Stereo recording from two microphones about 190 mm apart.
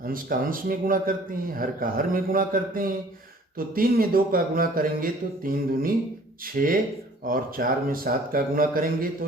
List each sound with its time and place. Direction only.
0.0 s speech: 50° right (ahead or behind)